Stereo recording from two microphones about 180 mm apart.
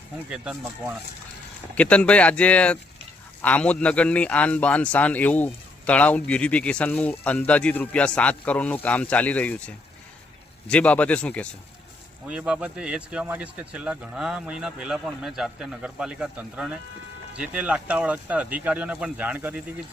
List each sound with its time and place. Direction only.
0.3 s speech: 5° right (ahead or behind)
1.7 s speech: 5° left (ahead or behind)
12.2 s speech: 5° right (ahead or behind)